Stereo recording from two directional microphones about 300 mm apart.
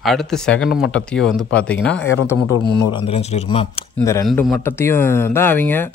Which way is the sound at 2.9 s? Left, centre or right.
Centre.